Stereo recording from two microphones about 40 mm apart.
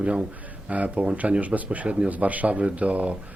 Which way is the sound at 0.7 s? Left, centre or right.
Right.